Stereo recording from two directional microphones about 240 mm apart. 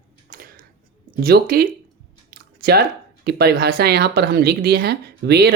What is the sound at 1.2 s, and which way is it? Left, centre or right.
Speech, right.